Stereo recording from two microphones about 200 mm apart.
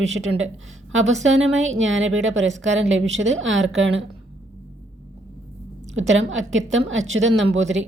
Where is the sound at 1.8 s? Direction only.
70° right (ahead or behind).